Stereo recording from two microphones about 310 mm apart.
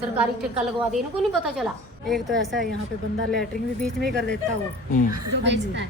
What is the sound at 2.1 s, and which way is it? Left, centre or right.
Speech, centre.